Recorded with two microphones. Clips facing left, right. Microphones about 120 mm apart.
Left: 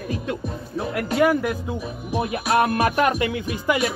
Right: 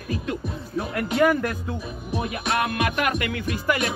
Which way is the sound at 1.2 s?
10° left (ahead or behind).